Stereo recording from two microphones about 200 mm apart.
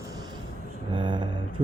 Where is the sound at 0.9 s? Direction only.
25° right (ahead or behind).